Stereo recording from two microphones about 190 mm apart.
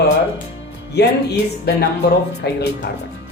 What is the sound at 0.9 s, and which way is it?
Speech, 60° left (ahead or behind).